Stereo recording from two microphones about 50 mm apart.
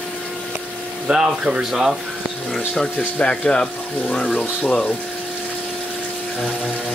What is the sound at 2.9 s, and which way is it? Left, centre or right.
Speech, left.